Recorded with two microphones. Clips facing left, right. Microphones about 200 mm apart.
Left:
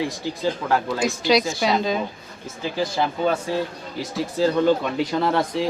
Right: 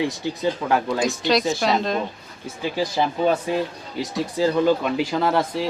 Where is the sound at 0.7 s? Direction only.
15° right (ahead or behind).